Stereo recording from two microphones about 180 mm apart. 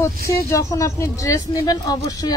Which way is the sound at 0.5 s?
15° left (ahead or behind).